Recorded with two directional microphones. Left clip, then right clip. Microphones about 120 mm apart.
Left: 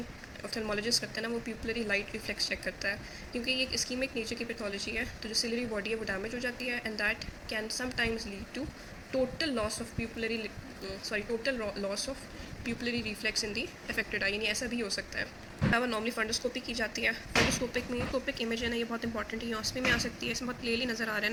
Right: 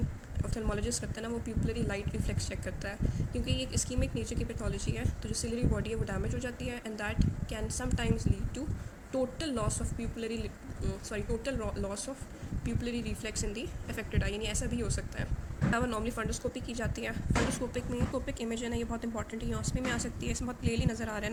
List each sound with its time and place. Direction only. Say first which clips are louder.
0.5 s speech: left 5 dB; 30° right (ahead or behind)
9.1 s speech: left 2 dB; 30° right (ahead or behind)